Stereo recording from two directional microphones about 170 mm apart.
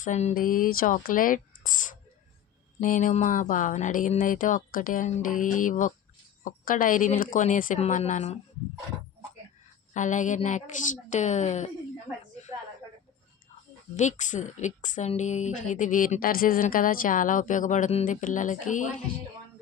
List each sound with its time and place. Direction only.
0.0 s a woman's voice: 45° left (ahead or behind)
0.3 s a woman's voice: 55° left (ahead or behind)
9.9 s a woman's voice: 45° left (ahead or behind)
13.9 s a woman's voice: 45° left (ahead or behind)